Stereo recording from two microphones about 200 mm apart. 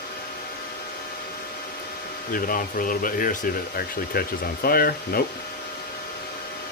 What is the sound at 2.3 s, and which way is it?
Speech, 45° left (ahead or behind).